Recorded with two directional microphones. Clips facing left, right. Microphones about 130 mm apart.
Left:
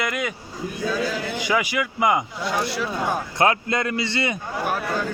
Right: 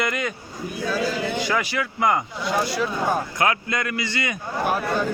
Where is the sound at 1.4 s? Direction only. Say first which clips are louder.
Left 1 dB; 15° left (ahead or behind).